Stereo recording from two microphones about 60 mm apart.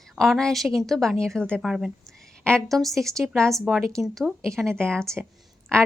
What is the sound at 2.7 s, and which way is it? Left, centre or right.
A woman's voice, centre.